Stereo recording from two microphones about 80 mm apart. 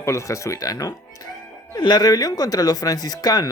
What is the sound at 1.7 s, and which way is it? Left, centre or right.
Speech, left.